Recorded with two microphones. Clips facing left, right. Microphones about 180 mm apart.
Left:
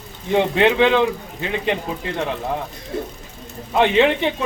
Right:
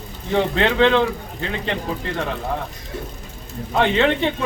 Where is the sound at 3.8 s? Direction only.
15° left (ahead or behind).